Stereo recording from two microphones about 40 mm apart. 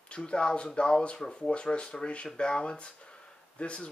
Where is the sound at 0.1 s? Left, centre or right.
Left.